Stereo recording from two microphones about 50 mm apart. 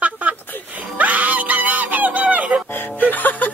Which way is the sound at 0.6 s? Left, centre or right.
Right.